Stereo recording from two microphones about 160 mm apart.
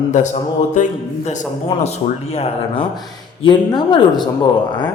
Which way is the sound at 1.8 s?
40° left (ahead or behind).